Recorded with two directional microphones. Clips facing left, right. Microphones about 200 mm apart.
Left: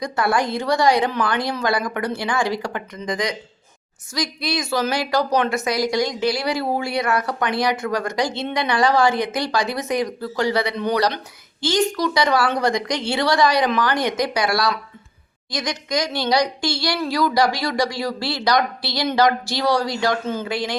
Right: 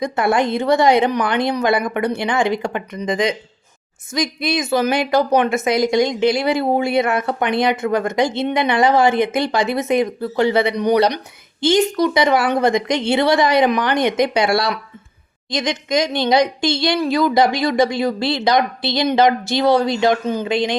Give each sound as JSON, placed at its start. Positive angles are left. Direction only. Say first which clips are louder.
{"t": 0.0, "sound": "a woman's voice", "louder": "right 4 dB", "side_deg": -25}